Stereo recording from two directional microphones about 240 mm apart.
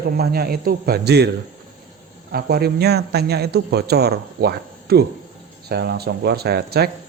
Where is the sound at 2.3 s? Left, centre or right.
Right.